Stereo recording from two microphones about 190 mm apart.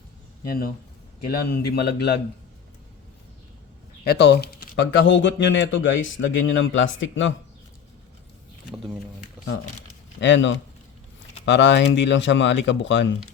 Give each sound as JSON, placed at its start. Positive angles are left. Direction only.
{"t": 0.4, "sound": "a man's voice", "side_deg": 50}
{"t": 4.0, "sound": "speech", "side_deg": 60}
{"t": 10.2, "sound": "speech", "side_deg": 75}